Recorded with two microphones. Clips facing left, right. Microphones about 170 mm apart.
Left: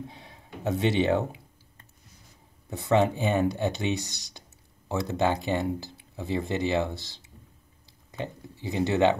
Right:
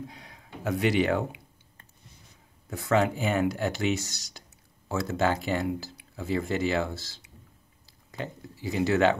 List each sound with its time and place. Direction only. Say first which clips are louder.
0.1 s speech: left 1 dB; 25° left (ahead or behind)
2.7 s speech: left 2 dB; 20° left (ahead or behind)